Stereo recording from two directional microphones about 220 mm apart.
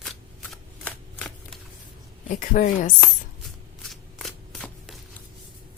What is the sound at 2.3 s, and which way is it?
Speech, 35° left (ahead or behind).